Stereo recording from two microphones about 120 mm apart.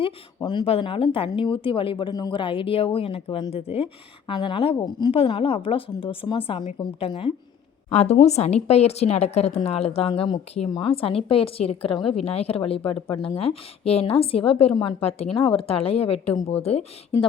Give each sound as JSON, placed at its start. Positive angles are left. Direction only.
{"t": 0.3, "sound": "speech", "side_deg": 35}
{"t": 0.6, "sound": "speech", "side_deg": 50}
{"t": 4.3, "sound": "speech", "side_deg": 45}
{"t": 4.9, "sound": "speech", "side_deg": 35}
{"t": 5.1, "sound": "speech", "side_deg": 50}
{"t": 7.9, "sound": "a woman's voice", "side_deg": 65}